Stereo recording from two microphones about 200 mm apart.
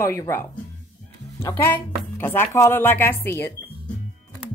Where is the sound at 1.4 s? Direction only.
10° left (ahead or behind).